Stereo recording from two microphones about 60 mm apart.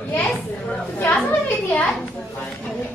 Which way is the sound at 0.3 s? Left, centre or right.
Centre.